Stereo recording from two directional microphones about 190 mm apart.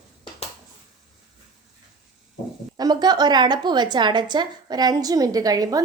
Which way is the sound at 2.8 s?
20° right (ahead or behind).